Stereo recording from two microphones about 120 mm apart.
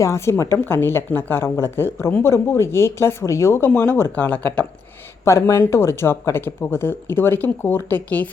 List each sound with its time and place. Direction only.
0.0 s speech: 25° left (ahead or behind)